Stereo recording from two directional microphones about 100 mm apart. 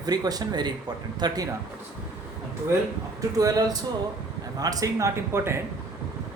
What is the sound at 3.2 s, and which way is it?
Speech, 35° right (ahead or behind).